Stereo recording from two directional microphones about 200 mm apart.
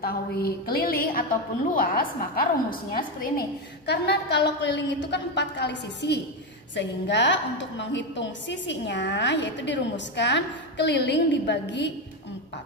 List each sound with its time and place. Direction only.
0.0 s a woman's voice: 50° left (ahead or behind)